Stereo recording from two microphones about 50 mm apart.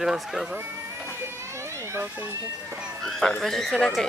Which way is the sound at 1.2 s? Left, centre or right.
Right.